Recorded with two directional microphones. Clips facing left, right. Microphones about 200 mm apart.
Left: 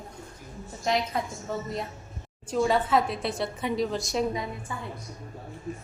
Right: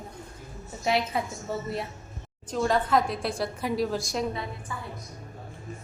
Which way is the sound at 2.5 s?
5° left (ahead or behind).